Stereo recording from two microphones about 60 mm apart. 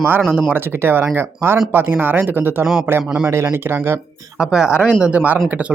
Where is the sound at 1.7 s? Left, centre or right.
Right.